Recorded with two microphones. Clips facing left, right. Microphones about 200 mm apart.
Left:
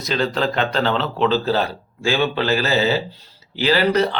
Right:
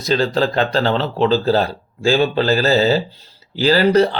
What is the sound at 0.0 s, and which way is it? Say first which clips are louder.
A man's voice: right 4 dB; 35° right (ahead or behind).